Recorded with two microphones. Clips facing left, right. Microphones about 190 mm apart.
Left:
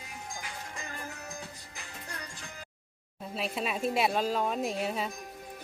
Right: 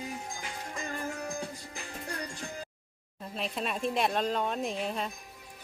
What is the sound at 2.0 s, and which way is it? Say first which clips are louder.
Music: right 7 dB; 35° right (ahead or behind).